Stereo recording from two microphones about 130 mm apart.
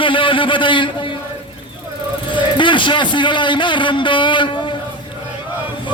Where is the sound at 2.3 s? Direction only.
40° left (ahead or behind).